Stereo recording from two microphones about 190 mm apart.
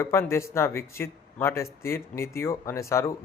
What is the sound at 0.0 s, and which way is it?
A man's voice, 15° left (ahead or behind).